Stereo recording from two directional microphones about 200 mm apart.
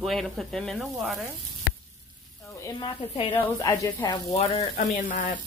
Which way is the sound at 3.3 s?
15° left (ahead or behind).